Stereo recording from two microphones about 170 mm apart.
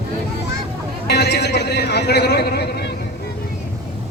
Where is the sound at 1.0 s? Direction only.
80° left.